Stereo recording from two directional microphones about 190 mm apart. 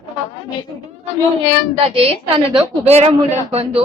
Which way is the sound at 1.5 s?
25° right (ahead or behind).